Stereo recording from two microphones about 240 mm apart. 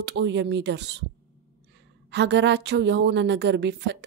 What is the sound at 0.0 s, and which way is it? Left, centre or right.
A woman's voice, right.